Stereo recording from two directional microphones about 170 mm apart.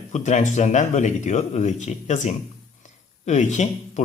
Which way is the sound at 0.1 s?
45° left (ahead or behind).